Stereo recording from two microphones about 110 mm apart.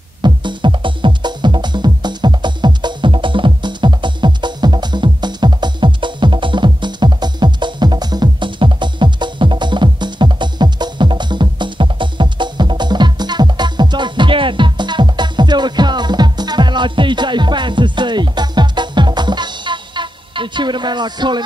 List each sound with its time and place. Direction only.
0.2 s music: 45° right (ahead or behind)